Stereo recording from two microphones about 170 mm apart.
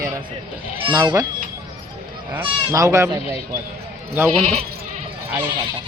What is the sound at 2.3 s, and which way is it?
Speech, 20° right (ahead or behind).